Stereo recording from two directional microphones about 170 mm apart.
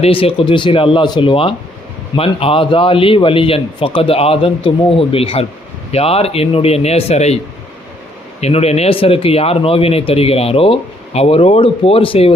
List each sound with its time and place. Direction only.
0.0 s speech: 35° left (ahead or behind)
8.4 s speech: 40° left (ahead or behind)